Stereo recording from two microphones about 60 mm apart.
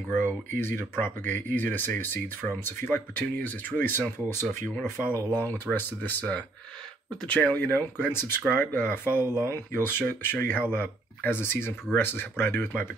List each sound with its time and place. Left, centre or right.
0.1 s speech: left
3.2 s speech: left
4.3 s speech: left